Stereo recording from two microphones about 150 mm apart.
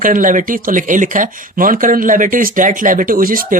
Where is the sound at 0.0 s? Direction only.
60° right (ahead or behind).